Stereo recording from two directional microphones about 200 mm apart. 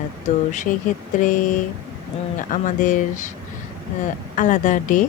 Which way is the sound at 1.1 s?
40° left (ahead or behind).